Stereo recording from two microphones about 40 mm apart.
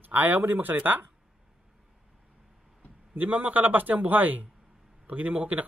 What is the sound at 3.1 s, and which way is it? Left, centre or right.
Speech, right.